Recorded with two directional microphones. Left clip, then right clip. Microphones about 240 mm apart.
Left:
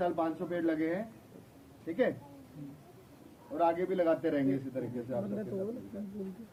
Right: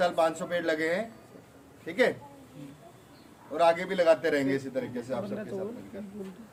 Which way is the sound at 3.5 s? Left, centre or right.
Right.